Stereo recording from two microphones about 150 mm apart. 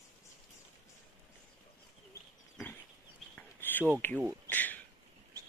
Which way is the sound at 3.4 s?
10° left (ahead or behind).